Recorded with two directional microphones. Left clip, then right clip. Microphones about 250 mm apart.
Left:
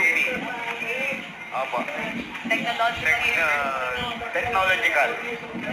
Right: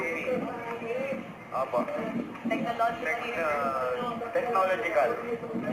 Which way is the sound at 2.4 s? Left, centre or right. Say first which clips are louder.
Left 5 dB; centre.